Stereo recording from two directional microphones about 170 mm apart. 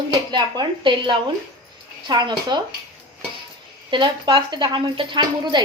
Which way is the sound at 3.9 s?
25° right (ahead or behind).